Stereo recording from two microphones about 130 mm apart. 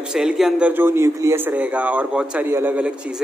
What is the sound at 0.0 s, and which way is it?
A man's voice, 5° right (ahead or behind).